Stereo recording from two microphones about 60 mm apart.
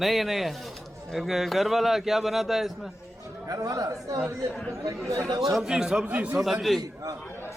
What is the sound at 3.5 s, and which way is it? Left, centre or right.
Speech, right.